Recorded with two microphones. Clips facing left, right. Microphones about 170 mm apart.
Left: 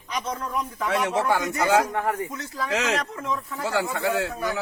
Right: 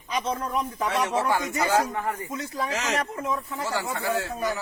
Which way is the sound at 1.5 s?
55° left (ahead or behind).